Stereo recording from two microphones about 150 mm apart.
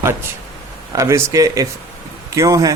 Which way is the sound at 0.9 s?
20° right (ahead or behind).